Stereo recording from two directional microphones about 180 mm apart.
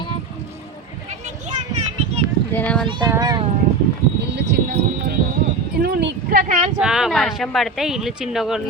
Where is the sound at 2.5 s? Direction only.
10° left (ahead or behind).